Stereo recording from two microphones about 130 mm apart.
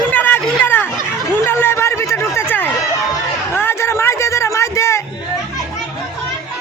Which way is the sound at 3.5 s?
20° left (ahead or behind).